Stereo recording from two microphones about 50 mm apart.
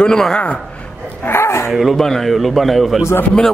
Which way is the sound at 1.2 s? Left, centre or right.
Left.